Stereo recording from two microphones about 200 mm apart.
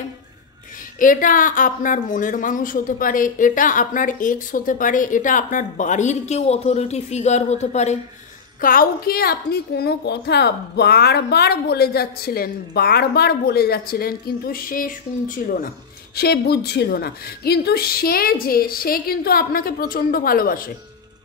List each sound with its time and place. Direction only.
0.9 s a woman's voice: 40° left (ahead or behind)